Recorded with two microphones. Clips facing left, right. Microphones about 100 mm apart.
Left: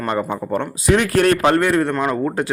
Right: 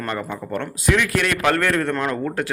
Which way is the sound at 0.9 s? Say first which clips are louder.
Left 7 dB; 40° left (ahead or behind).